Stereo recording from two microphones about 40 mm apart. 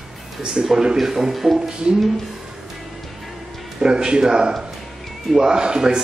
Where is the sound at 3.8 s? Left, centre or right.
Right.